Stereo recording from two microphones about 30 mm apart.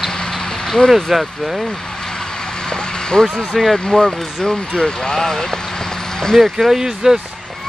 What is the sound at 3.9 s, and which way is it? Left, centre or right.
Speech, left.